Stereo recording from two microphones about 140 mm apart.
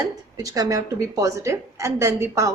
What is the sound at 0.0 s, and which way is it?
A woman's voice, 25° right (ahead or behind).